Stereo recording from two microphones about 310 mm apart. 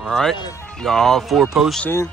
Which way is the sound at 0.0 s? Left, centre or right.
Centre.